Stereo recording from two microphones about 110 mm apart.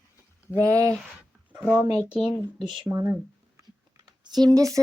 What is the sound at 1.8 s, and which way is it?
Speech, 40° right (ahead or behind).